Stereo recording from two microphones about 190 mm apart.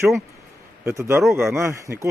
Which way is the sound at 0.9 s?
15° right (ahead or behind).